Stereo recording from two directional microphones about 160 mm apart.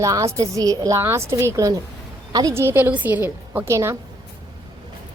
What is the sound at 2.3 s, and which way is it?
A woman's voice, 20° right (ahead or behind).